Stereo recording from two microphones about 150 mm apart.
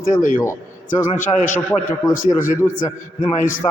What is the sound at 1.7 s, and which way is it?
Speech, 15° left (ahead or behind).